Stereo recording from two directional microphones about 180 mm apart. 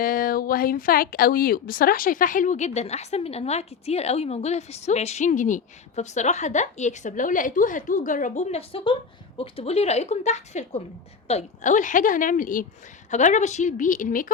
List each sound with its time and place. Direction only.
0.0 s a woman's voice: 55° left (ahead or behind)